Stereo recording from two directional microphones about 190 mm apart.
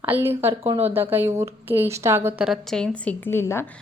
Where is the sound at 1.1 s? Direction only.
10° right (ahead or behind); by 3.7 s 10° left (ahead or behind).